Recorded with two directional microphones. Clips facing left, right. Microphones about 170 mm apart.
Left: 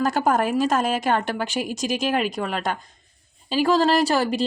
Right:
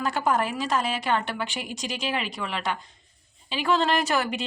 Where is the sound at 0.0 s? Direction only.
40° left (ahead or behind).